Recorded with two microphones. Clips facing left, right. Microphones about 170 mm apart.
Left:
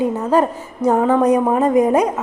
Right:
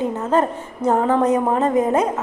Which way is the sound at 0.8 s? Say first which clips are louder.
Left 3 dB; 25° right (ahead or behind).